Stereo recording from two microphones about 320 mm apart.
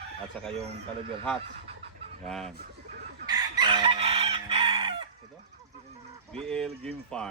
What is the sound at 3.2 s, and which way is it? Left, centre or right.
Chicken, centre.